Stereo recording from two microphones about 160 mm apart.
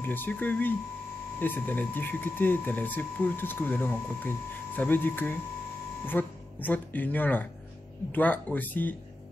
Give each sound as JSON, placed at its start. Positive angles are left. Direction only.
{"t": 0.0, "sound": "speech", "side_deg": 10}